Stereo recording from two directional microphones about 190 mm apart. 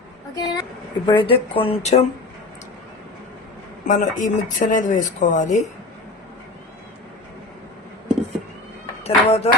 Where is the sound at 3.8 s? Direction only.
40° left (ahead or behind).